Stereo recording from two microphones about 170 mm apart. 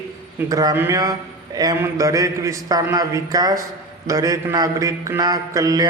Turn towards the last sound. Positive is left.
turn(degrees=-20)  # may be behind; listen again after turning